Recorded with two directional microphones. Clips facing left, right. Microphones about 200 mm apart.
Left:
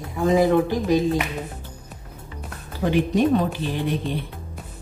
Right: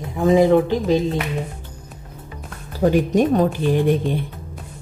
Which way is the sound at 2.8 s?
45° right (ahead or behind).